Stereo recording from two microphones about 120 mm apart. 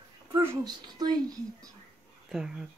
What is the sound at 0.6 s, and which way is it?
Speech, 35° right (ahead or behind).